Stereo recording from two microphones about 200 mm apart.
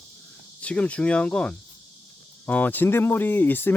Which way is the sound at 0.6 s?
5° left (ahead or behind).